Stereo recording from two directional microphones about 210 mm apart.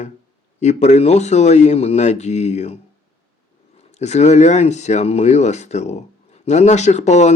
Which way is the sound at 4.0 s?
30° left (ahead or behind).